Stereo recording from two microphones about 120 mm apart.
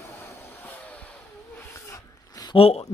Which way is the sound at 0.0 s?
20° left (ahead or behind).